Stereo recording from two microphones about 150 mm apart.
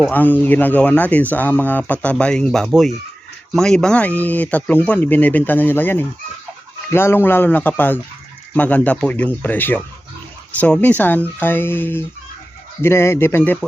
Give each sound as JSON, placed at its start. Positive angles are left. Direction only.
{"t": 0.1, "sound": "speech", "side_deg": 10}